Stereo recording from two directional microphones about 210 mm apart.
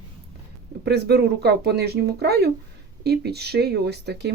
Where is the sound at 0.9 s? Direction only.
50° right (ahead or behind).